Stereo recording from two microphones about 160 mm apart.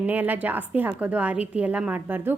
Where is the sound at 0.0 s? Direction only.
10° right (ahead or behind).